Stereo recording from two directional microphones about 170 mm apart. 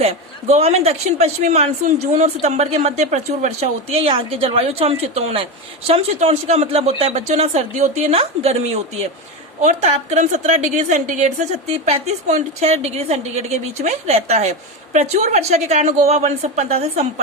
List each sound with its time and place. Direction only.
0.0 s a woman's voice: 40° right (ahead or behind)